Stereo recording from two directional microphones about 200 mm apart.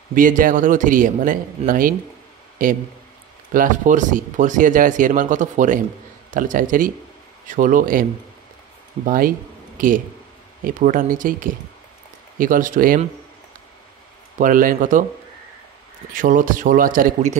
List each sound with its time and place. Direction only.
0.1 s speech: 40° right (ahead or behind)
3.5 s speech: 40° right (ahead or behind)
10.6 s speech: 45° right (ahead or behind)
14.4 s speech: 45° right (ahead or behind)
16.1 s speech: 40° right (ahead or behind)